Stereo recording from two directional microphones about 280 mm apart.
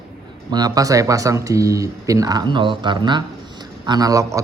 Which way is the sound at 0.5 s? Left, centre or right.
Centre.